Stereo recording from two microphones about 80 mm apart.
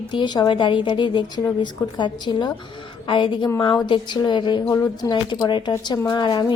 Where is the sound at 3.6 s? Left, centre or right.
Left.